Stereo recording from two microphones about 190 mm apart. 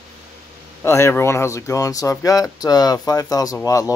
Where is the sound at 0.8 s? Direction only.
15° left (ahead or behind).